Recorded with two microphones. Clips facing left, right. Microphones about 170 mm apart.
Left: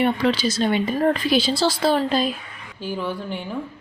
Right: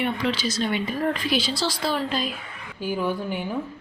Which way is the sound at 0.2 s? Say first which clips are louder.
Left 5 dB; 40° left (ahead or behind).